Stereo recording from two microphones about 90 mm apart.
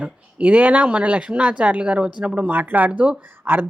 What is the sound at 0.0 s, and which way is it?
A woman's voice, 15° right (ahead or behind).